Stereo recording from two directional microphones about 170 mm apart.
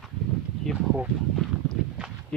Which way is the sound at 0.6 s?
Centre (ahead or behind).